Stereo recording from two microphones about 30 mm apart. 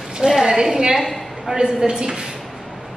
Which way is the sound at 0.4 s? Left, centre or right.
Centre.